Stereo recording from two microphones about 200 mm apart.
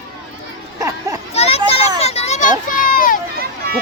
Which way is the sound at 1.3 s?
30° left (ahead or behind).